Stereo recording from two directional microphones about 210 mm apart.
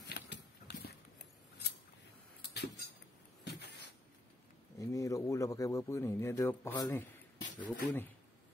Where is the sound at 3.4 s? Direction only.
55° left (ahead or behind).